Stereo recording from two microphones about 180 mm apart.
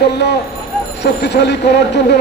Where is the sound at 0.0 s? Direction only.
70° left (ahead or behind).